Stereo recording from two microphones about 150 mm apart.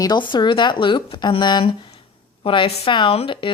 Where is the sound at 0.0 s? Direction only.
30° left (ahead or behind).